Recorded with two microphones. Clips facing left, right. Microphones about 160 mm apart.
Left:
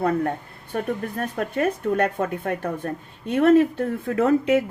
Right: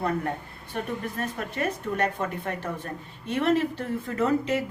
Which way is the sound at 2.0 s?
50° left (ahead or behind).